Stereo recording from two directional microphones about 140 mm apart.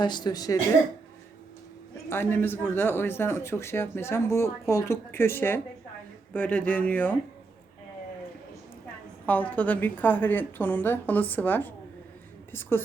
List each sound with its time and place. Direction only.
0.0 s speech: 30° left (ahead or behind)
2.0 s speech: 15° left (ahead or behind)
9.2 s a woman's voice: 10° left (ahead or behind)